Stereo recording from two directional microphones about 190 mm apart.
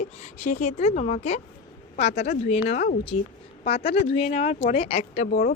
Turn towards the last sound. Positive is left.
turn(degrees=50)  # may be behind; listen again after turning